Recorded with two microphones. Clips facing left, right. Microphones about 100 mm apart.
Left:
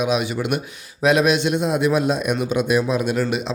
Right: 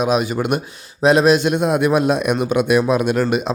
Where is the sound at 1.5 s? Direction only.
55° right (ahead or behind).